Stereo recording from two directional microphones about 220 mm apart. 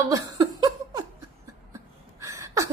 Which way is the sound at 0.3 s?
15° right (ahead or behind).